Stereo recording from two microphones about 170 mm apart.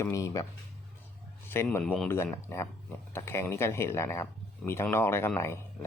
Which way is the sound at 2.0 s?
15° left (ahead or behind).